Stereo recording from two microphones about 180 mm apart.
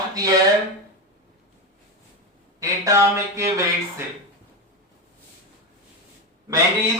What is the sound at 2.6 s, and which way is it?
Speech, 15° right (ahead or behind).